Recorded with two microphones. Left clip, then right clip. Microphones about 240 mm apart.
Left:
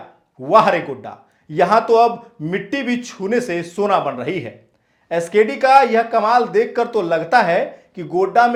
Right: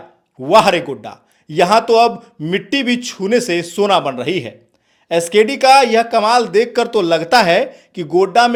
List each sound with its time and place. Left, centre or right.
0.4 s speech: right